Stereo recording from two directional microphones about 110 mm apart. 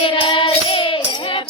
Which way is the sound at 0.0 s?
50° left (ahead or behind).